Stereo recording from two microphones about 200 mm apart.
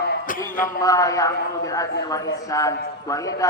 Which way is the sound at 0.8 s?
15° left (ahead or behind).